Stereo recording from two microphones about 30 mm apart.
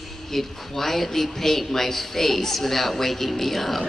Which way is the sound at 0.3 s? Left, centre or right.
Centre.